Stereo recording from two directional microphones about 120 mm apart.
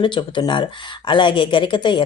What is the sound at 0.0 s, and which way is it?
Speech, 40° left (ahead or behind).